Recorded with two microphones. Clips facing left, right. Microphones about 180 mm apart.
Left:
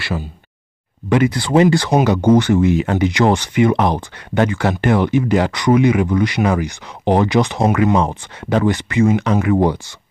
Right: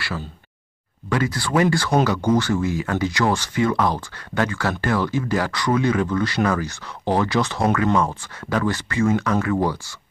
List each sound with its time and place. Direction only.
0.0 s speech: 20° left (ahead or behind)